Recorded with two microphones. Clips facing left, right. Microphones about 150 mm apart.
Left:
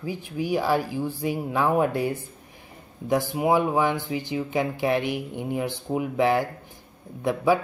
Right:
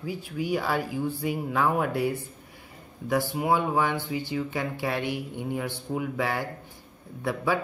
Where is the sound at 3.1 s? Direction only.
20° left (ahead or behind).